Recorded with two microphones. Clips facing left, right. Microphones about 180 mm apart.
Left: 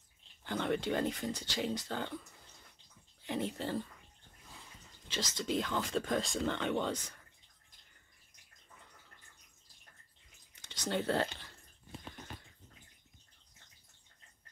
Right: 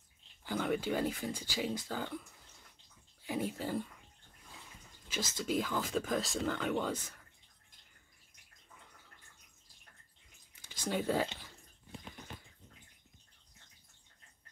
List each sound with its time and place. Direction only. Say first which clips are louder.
0.4 s speech: even; 5° right (ahead or behind)
3.3 s speech: even; 10° right (ahead or behind)
5.0 s speech: even; 10° right (ahead or behind)
10.5 s a sound: even; 5° right (ahead or behind)